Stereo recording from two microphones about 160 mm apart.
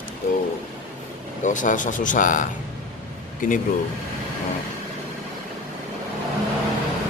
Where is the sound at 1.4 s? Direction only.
55° left (ahead or behind).